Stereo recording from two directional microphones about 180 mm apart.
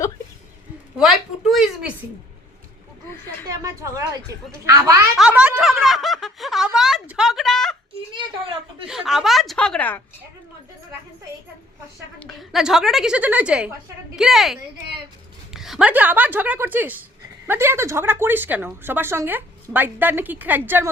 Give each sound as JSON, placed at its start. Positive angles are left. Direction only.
{"t": 0.9, "sound": "a woman's voice", "side_deg": 0}
{"t": 3.4, "sound": "a woman's voice", "side_deg": -20}
{"t": 5.1, "sound": "snicker", "side_deg": -5}
{"t": 8.1, "sound": "a woman's voice", "side_deg": -30}
{"t": 8.9, "sound": "a woman's voice", "side_deg": 0}
{"t": 12.2, "sound": "a woman's voice", "side_deg": 0}